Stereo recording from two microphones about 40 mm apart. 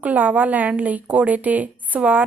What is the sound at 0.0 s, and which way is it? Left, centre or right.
A woman's voice, right.